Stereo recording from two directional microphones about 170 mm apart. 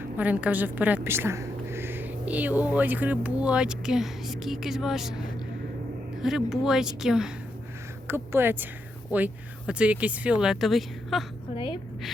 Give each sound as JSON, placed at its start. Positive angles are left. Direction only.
{"t": 0.2, "sound": "a woman's voice", "side_deg": -10}
{"t": 6.2, "sound": "a woman's voice", "side_deg": -5}
{"t": 11.5, "sound": "a woman's voice", "side_deg": 30}